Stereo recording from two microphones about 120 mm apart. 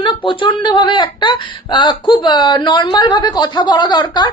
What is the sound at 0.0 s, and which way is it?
Speech, 45° left (ahead or behind).